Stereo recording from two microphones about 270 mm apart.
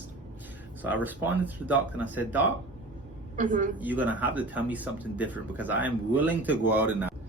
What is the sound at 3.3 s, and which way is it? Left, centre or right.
Speech, right.